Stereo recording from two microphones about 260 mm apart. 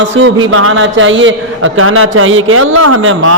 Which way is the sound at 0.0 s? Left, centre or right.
Right.